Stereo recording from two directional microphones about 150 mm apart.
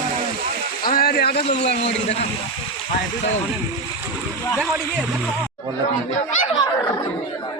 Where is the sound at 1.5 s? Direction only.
45° left (ahead or behind).